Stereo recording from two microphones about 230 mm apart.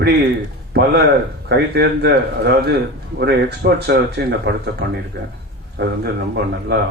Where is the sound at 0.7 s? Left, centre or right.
Right.